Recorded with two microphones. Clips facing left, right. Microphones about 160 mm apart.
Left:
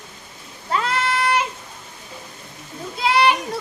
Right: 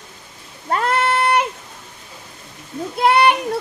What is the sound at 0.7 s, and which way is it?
Cat, 55° right (ahead or behind).